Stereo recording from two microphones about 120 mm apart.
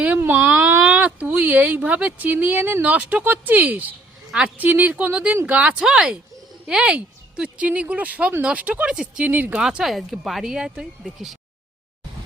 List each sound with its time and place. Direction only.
0.0 s a sound: 15° right (ahead or behind)
0.8 s speech: 10° right (ahead or behind)
9.6 s speech: 5° right (ahead or behind)